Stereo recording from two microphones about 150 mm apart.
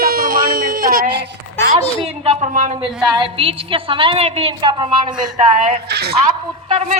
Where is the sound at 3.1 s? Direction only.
35° right (ahead or behind).